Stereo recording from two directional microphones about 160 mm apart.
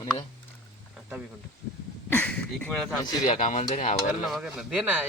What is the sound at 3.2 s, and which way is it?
Speech, 35° left (ahead or behind).